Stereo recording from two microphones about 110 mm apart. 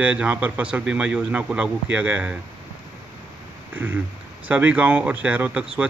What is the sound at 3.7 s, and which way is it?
A man's voice, 15° right (ahead or behind).